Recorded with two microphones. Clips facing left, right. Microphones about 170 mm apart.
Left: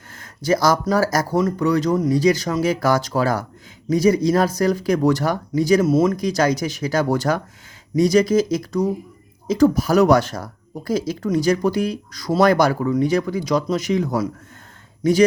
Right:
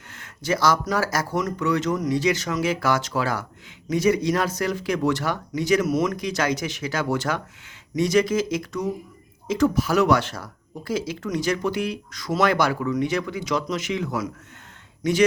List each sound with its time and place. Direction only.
0.1 s speech: 40° left (ahead or behind)